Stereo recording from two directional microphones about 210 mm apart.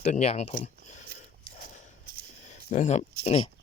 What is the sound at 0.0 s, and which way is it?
Speech, 30° left (ahead or behind).